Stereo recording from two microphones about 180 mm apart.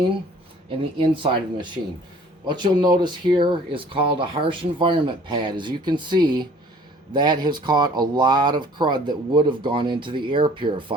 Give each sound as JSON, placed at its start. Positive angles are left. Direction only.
{"t": 0.8, "sound": "speech", "side_deg": -30}